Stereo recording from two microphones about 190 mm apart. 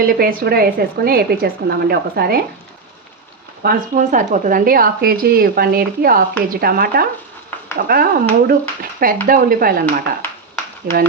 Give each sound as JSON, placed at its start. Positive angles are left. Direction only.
{"t": 0.1, "sound": "speech", "side_deg": -50}
{"t": 3.6, "sound": "speech", "side_deg": -45}
{"t": 10.8, "sound": "speech", "side_deg": -50}